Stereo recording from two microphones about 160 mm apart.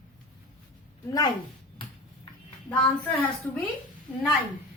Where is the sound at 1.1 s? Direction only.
25° left (ahead or behind).